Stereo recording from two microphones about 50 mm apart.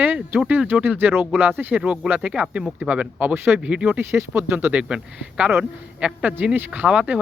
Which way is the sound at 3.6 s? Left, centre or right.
Right.